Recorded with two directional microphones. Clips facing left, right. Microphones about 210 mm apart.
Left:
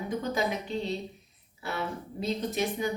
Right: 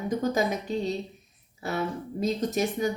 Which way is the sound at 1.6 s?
45° right (ahead or behind).